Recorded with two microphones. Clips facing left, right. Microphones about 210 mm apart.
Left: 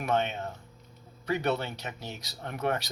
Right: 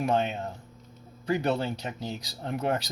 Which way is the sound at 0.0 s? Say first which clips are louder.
Right 2 dB; 30° right (ahead or behind).